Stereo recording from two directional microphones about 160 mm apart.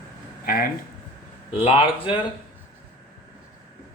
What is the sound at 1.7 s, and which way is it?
Speech, 35° left (ahead or behind).